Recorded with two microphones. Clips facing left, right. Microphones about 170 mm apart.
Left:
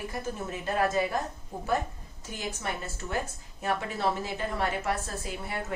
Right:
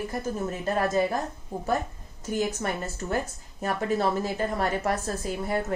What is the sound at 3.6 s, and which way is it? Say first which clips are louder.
A woman's voice: right 4 dB; 40° right (ahead or behind).